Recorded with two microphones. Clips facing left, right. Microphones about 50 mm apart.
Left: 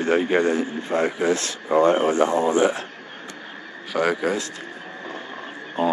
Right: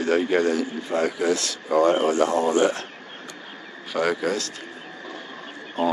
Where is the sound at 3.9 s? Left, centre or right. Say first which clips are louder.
Left 1 dB; centre.